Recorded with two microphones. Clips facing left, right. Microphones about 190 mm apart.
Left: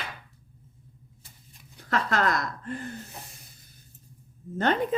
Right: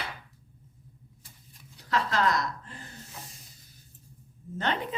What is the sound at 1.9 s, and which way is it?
A woman's voice, 50° left (ahead or behind).